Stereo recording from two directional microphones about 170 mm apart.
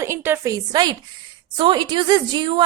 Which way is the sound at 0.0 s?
15° right (ahead or behind).